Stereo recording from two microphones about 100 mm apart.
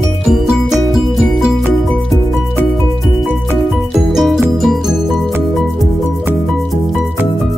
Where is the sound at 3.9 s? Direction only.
5° right (ahead or behind).